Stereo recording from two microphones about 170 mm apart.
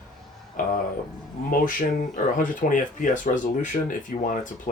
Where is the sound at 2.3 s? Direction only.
50° left (ahead or behind).